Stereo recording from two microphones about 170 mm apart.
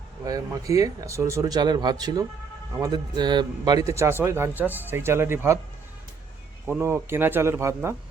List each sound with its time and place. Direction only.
0.3 s a man's voice: 20° right (ahead or behind)
6.7 s a man's voice: 15° right (ahead or behind)